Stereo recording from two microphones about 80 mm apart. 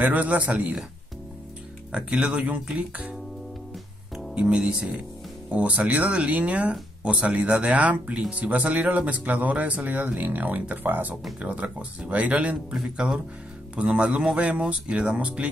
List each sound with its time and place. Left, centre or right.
0.0 s speech: right
1.9 s speech: centre
4.4 s speech: centre